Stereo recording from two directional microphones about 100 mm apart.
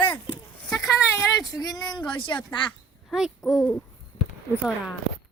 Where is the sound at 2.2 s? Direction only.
55° left (ahead or behind).